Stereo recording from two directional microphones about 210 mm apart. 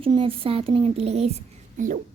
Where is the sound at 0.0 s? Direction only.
25° right (ahead or behind).